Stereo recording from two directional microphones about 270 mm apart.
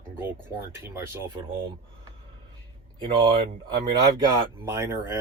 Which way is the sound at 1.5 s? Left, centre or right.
Centre.